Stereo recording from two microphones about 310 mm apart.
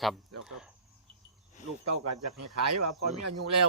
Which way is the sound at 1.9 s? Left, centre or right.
Right.